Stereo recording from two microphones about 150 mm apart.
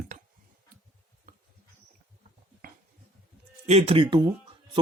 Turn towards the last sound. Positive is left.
turn(degrees=-30)  # may be behind; listen again after turning